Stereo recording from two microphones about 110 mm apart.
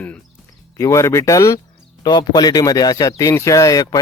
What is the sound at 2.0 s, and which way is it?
Speech, 40° left (ahead or behind).